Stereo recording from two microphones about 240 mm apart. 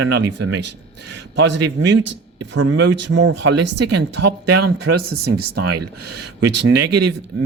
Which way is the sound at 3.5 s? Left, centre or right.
Right.